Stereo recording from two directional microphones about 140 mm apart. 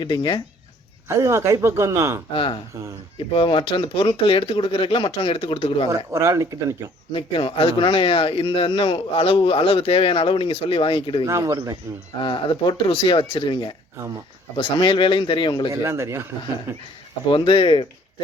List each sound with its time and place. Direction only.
0.0 s a man's voice: 35° left (ahead or behind)
1.0 s speech: 20° right (ahead or behind)
2.3 s a man's voice: 40° left (ahead or behind)
6.1 s speech: 20° right (ahead or behind)
7.1 s a man's voice: 40° left (ahead or behind)
11.3 s speech: 25° right (ahead or behind)
12.2 s a man's voice: 35° left (ahead or behind)
15.7 s speech: 20° right (ahead or behind)
17.3 s a man's voice: 35° left (ahead or behind)